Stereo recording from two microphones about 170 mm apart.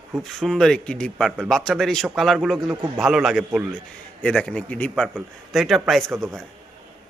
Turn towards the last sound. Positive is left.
turn(degrees=0)  # may be behind; listen again after turning